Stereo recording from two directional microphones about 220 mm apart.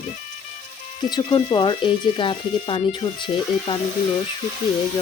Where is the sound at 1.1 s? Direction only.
20° left (ahead or behind).